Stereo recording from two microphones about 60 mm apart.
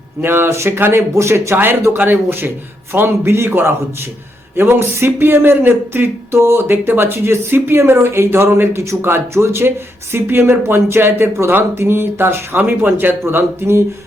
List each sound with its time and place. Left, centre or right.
0.2 s speech: right
2.0 s speech: right